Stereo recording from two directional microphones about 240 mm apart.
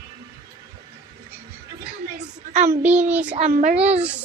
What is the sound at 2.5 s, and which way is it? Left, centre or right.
Speech, right.